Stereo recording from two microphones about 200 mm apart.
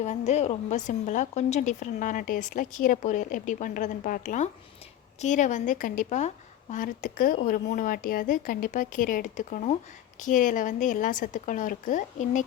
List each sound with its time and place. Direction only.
0.0 s a woman's voice: 35° left (ahead or behind)